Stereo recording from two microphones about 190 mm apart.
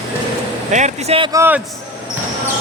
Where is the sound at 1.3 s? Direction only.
10° right (ahead or behind).